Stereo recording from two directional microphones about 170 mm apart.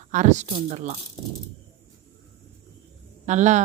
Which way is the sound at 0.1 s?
45° right (ahead or behind).